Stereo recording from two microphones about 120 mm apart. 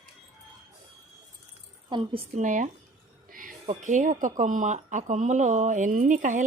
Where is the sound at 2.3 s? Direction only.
90° right.